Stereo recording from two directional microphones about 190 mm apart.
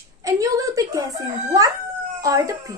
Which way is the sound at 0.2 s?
20° right (ahead or behind).